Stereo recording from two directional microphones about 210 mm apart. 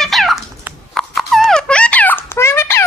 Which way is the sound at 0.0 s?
Centre (ahead or behind).